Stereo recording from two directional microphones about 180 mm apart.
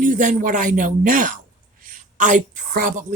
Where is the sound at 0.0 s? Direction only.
45° right (ahead or behind).